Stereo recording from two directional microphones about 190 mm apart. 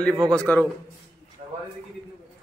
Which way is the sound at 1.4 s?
40° right (ahead or behind).